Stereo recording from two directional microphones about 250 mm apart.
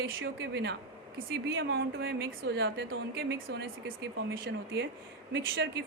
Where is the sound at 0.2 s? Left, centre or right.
Right.